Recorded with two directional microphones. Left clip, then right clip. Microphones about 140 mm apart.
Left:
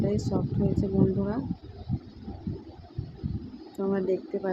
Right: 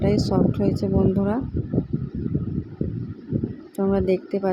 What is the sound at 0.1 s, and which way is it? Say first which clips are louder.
Speech: right 9 dB; 40° right (ahead or behind).